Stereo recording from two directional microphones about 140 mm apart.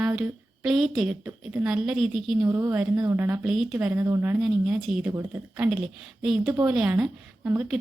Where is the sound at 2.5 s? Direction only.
20° right (ahead or behind).